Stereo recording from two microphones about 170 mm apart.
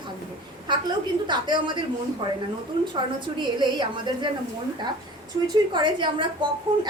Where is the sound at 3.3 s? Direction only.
25° right (ahead or behind).